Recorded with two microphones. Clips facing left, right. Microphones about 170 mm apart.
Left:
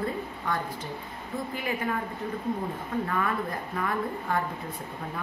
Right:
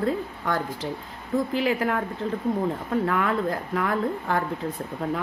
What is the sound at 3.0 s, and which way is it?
A woman's voice, 75° right (ahead or behind).